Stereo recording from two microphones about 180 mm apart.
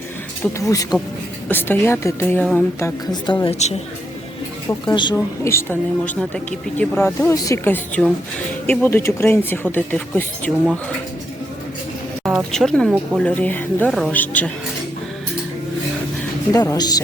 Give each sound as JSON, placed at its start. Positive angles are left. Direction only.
{"t": 0.6, "sound": "a woman's voice", "side_deg": 20}
{"t": 3.4, "sound": "a woman's voice", "side_deg": 35}
{"t": 4.9, "sound": "a woman's voice", "side_deg": 20}
{"t": 12.5, "sound": "speech", "side_deg": 5}
{"t": 16.5, "sound": "a woman's voice", "side_deg": 20}